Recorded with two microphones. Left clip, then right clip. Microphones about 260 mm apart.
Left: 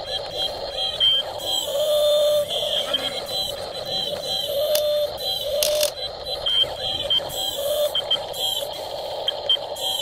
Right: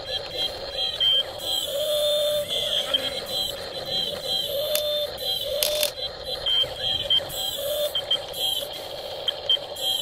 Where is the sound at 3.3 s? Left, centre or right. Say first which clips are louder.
Left 2 dB; left.